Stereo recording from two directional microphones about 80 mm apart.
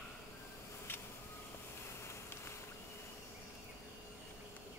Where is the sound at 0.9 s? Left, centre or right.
Left.